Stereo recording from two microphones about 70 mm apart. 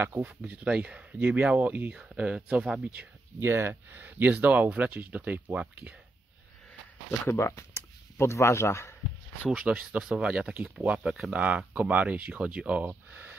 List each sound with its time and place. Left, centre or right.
0.0 s speech: right
3.3 s speech: right
7.2 s speech: left
9.6 s speech: centre
10.5 s speech: right
10.9 s speech: centre
13.1 s a sound: right